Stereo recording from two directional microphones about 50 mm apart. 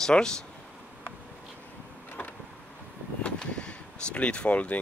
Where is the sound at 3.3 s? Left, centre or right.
Left.